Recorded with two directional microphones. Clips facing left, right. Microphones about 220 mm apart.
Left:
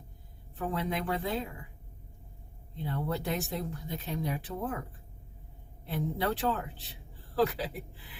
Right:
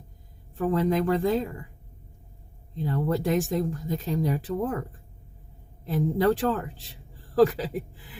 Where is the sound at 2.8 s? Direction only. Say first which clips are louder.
Right 7 dB; 45° right (ahead or behind).